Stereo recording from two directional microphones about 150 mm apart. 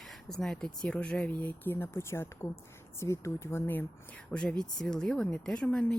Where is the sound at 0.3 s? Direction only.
5° left (ahead or behind).